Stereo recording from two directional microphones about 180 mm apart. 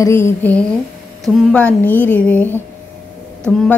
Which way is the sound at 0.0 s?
15° left (ahead or behind).